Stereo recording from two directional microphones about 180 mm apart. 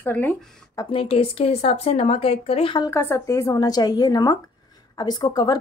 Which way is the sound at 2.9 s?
15° left (ahead or behind).